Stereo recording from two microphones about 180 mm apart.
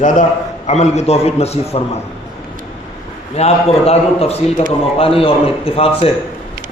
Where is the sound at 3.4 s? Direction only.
35° left (ahead or behind).